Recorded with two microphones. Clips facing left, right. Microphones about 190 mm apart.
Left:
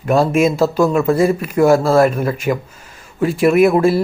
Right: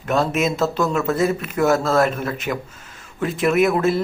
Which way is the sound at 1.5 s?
30° left (ahead or behind).